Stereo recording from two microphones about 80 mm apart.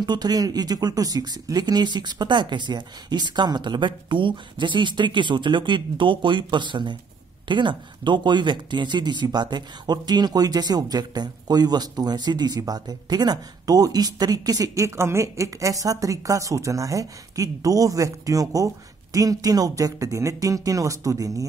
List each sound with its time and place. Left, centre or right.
0.0 s speech: right
14.9 s speech: right